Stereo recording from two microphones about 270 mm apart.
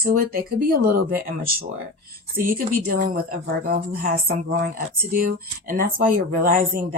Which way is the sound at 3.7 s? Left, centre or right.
Right.